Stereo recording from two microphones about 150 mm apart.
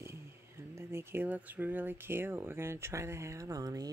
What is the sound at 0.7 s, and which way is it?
Speech, 15° right (ahead or behind).